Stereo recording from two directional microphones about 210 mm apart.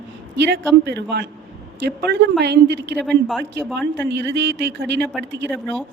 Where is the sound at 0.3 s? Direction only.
55° right (ahead or behind).